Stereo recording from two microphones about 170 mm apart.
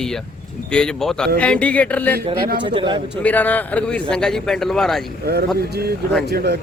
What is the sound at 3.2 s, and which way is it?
Music, 10° left (ahead or behind).